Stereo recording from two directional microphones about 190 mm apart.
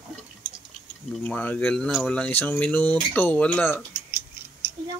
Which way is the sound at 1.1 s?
5° left (ahead or behind).